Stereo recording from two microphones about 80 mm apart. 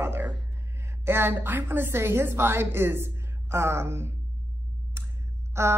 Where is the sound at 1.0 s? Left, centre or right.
Right.